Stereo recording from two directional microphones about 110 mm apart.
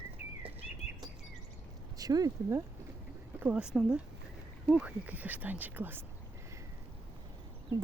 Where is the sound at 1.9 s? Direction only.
35° right (ahead or behind).